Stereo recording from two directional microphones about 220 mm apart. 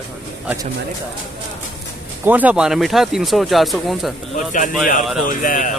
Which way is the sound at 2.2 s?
5° right (ahead or behind).